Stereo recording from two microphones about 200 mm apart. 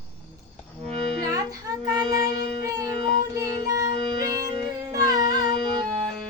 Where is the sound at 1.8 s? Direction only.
20° right (ahead or behind).